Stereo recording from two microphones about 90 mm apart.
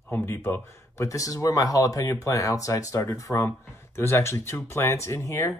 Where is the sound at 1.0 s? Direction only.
40° left (ahead or behind).